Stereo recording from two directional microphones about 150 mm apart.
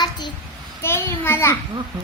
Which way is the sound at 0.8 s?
15° left (ahead or behind).